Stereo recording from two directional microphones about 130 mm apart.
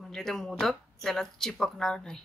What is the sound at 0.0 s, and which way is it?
Speech, centre (ahead or behind).